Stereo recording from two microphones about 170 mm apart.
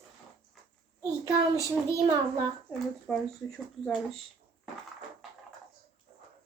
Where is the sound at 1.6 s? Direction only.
20° right (ahead or behind).